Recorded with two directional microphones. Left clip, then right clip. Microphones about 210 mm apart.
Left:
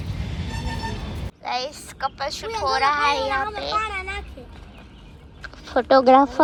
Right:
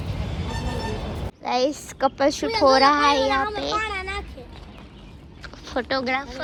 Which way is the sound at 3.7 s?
45° right (ahead or behind).